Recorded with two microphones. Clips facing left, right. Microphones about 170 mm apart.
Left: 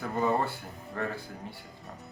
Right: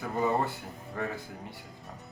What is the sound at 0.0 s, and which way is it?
Speech, centre (ahead or behind).